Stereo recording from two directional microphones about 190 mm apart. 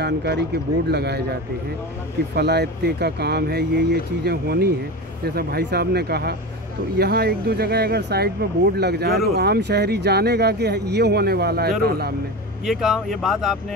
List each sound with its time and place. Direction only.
0.0 s speech: 60° right (ahead or behind)
2.3 s speech: 60° right (ahead or behind)
12.6 s speech: centre (ahead or behind)